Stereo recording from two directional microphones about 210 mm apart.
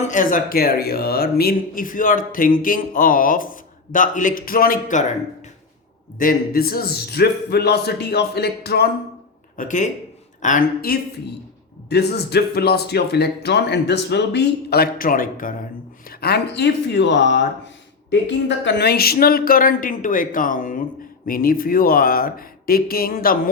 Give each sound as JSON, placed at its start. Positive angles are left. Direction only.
{"t": 0.1, "sound": "speech", "side_deg": 40}
{"t": 6.1, "sound": "speech", "side_deg": 45}
{"t": 9.6, "sound": "speech", "side_deg": 35}
{"t": 11.9, "sound": "speech", "side_deg": 50}
{"t": 16.0, "sound": "speech", "side_deg": 50}